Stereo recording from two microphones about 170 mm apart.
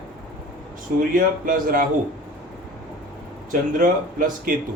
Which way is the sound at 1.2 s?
55° right (ahead or behind).